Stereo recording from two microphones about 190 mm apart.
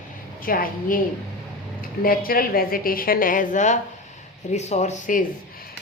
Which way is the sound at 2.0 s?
50° left (ahead or behind).